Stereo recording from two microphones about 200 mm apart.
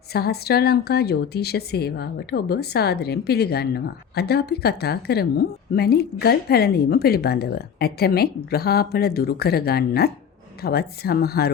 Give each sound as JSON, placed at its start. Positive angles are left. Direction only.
{"t": 0.1, "sound": "speech", "side_deg": 50}